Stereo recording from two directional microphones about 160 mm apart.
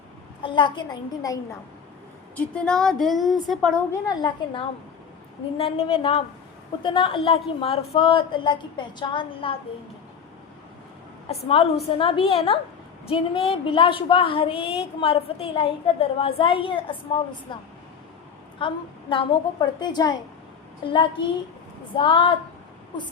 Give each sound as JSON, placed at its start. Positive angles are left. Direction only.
{"t": 0.4, "sound": "a woman's voice", "side_deg": 30}
{"t": 2.3, "sound": "speech", "side_deg": 10}
{"t": 4.0, "sound": "a woman's voice", "side_deg": 25}
{"t": 5.5, "sound": "a woman's voice", "side_deg": 35}
{"t": 11.3, "sound": "a woman's voice", "side_deg": 35}